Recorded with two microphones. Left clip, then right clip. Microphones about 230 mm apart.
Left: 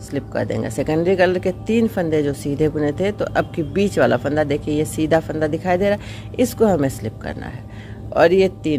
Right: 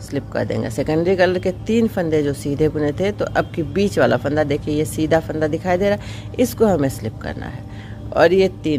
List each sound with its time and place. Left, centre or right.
0.1 s speech: centre